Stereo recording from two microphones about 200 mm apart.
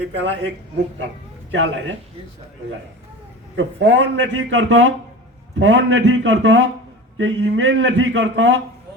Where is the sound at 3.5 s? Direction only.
65° right (ahead or behind).